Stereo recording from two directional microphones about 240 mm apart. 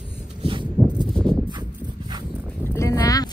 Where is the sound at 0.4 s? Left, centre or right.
Right.